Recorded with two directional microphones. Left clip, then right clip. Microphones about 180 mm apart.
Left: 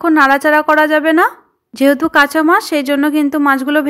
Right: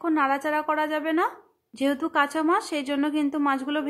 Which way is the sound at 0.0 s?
30° left (ahead or behind).